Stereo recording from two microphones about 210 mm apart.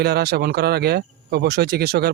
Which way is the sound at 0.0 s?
50° right (ahead or behind).